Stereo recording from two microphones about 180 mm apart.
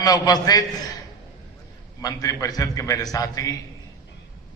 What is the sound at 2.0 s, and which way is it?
A man's voice, 20° left (ahead or behind).